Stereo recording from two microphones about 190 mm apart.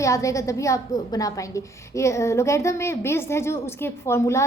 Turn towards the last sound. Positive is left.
turn(degrees=15)  # may be behind; listen again after turning